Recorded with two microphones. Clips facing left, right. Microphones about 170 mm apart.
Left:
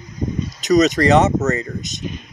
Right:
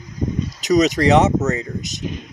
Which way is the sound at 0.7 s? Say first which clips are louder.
Left 1 dB; 10° right (ahead or behind).